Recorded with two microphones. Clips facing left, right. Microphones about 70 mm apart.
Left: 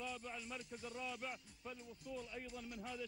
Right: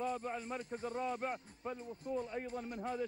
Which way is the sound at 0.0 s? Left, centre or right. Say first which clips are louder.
Right 9 dB; right.